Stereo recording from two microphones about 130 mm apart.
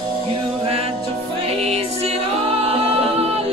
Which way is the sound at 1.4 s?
50° right (ahead or behind).